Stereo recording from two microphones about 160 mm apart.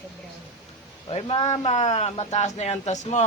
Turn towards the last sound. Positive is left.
turn(degrees=45)  # may be behind; listen again after turning